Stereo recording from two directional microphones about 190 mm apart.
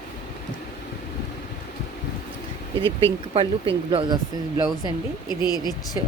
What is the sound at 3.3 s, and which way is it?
Speech, 30° right (ahead or behind).